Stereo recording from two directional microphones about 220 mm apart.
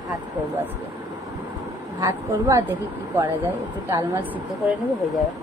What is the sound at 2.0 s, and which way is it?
Speech, 15° right (ahead or behind).